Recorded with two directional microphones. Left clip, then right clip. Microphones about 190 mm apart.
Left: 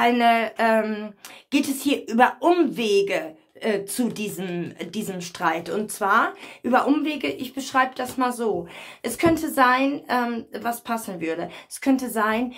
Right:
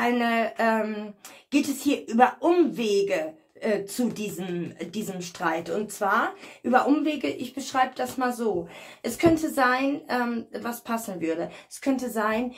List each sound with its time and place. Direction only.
0.0 s speech: 35° left (ahead or behind)